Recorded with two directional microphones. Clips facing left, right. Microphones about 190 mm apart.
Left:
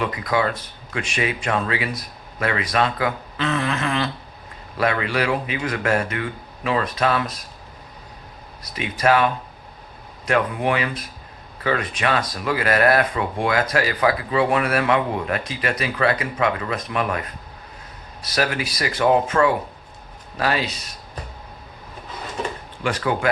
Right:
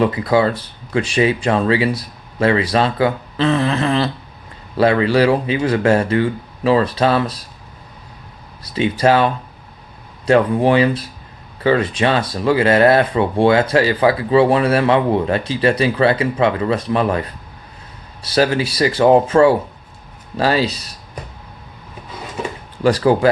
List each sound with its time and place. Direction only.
0.0 s speech: 30° right (ahead or behind)
8.6 s speech: 30° right (ahead or behind)
22.8 s speech: 35° right (ahead or behind)